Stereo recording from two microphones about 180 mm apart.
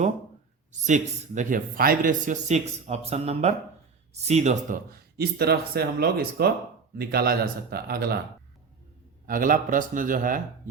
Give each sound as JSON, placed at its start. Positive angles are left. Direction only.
{"t": 0.9, "sound": "a man's voice", "side_deg": -45}
{"t": 4.9, "sound": "speech", "side_deg": -60}
{"t": 9.2, "sound": "a man's voice", "side_deg": -50}